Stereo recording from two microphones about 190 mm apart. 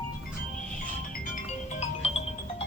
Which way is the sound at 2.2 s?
35° left (ahead or behind).